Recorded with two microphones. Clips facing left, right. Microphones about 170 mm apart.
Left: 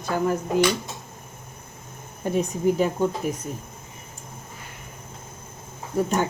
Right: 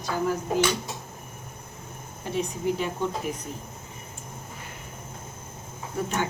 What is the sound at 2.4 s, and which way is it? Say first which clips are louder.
Speech: left 5 dB; 45° left (ahead or behind).